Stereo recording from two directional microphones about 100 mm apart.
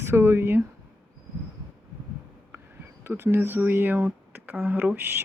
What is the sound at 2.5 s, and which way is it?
Insect, 30° right (ahead or behind).